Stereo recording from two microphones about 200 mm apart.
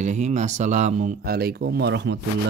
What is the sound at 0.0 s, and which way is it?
Speech, 35° right (ahead or behind).